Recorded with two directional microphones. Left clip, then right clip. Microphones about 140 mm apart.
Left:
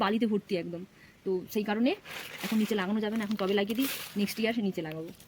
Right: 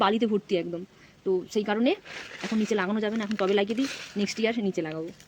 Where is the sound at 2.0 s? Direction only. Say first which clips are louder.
Right 2 dB; 10° right (ahead or behind).